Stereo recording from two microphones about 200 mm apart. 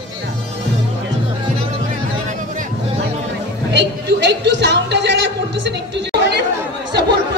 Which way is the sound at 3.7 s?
60° right (ahead or behind).